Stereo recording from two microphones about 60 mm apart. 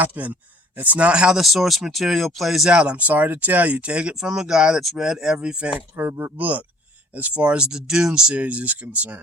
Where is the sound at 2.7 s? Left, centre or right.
Centre.